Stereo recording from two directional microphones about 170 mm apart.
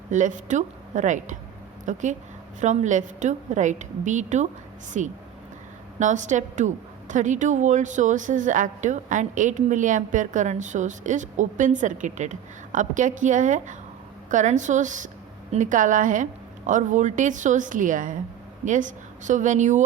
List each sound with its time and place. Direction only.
0.1 s a woman's voice: 50° right (ahead or behind)